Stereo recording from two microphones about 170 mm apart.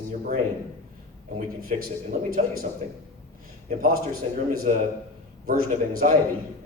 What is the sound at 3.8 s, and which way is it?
Speech, 60° right (ahead or behind).